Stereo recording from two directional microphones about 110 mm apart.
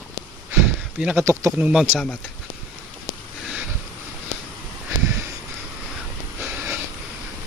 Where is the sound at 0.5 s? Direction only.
10° right (ahead or behind).